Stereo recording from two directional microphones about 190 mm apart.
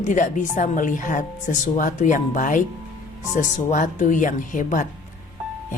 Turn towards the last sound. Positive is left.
turn(degrees=45)  # may be behind; listen again after turning